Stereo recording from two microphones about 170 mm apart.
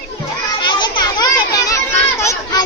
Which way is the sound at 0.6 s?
25° left (ahead or behind).